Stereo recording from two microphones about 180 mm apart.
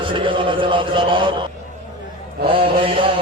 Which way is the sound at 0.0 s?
30° right (ahead or behind).